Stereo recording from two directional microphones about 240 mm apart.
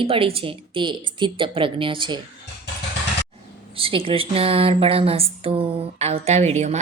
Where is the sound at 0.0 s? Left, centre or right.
Right.